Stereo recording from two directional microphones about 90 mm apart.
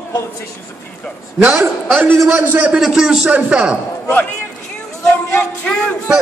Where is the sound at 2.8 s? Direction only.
5° right (ahead or behind).